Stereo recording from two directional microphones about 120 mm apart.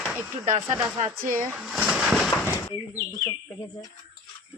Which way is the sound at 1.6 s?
10° right (ahead or behind).